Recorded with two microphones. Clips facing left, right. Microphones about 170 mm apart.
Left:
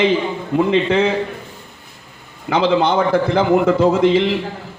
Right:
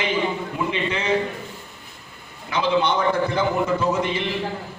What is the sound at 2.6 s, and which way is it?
A man's voice, 90° left.